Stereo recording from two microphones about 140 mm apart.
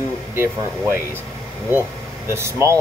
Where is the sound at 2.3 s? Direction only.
20° right (ahead or behind).